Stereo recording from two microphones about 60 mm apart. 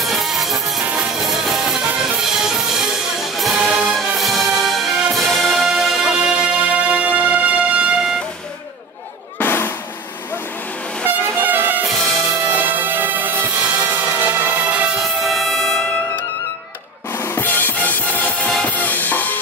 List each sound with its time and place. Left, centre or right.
0.0 s music: centre
6.7 s music: right
9.4 s drum: left
11.3 s music: right
11.8 s music: centre
12.5 s music: right
15.0 s music: centre
17.1 s music: left